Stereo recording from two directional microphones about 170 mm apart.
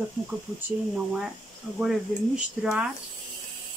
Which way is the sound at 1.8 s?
5° right (ahead or behind).